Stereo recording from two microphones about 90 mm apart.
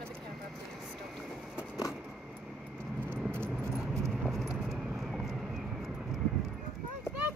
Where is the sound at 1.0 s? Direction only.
5° right (ahead or behind).